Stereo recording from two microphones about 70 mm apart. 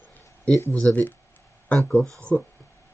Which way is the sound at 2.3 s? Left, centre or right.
Left.